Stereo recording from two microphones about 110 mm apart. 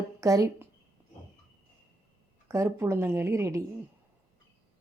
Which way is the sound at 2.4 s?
25° right (ahead or behind).